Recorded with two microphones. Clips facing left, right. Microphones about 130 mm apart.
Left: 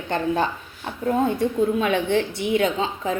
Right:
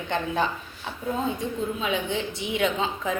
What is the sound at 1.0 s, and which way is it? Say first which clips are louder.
A woman's voice: left 7 dB; 65° left (ahead or behind).